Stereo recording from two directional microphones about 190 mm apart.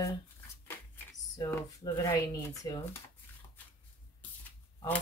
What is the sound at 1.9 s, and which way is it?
Speech, 20° left (ahead or behind).